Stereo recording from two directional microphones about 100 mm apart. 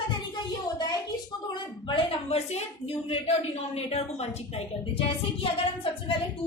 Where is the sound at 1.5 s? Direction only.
55° left (ahead or behind).